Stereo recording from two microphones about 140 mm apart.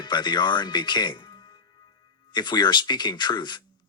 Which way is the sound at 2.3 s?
30° left (ahead or behind).